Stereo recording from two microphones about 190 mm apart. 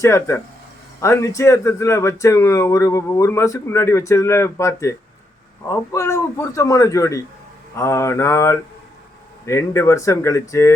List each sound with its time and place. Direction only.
0.0 s speech: 15° left (ahead or behind)